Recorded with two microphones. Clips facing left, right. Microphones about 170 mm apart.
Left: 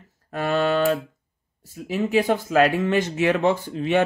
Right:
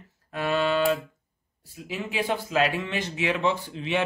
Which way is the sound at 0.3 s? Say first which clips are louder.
Left 3 dB; 45° left (ahead or behind).